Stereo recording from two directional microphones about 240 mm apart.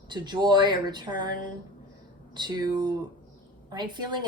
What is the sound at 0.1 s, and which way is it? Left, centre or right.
A woman's voice, centre.